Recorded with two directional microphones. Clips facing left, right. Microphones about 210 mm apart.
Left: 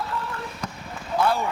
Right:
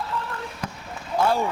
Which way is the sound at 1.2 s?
45° right (ahead or behind).